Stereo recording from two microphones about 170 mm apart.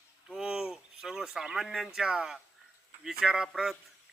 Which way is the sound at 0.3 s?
Centre (ahead or behind).